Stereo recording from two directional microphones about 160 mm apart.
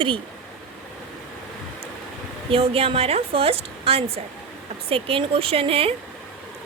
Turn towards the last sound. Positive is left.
turn(degrees=-35)  # may be behind; listen again after turning